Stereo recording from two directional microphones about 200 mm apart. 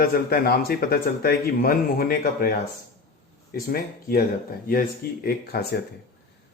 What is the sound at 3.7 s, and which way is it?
Speech, 50° left (ahead or behind).